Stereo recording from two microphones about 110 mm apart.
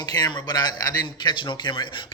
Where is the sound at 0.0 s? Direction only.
35° left (ahead or behind).